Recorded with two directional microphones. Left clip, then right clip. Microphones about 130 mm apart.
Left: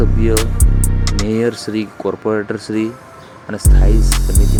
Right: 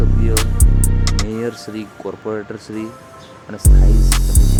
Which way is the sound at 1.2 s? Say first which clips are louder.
Left 6 dB; 35° left (ahead or behind).